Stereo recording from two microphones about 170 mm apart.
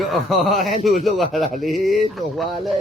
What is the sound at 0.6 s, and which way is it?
Speech, 50° right (ahead or behind).